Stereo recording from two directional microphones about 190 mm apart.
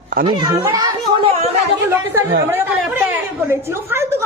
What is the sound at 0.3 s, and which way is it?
Speech, 20° right (ahead or behind).